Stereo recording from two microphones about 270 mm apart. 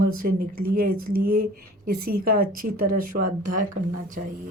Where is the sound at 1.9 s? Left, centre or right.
Right.